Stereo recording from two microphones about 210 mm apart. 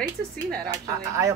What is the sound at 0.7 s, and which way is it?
Speech, 15° right (ahead or behind).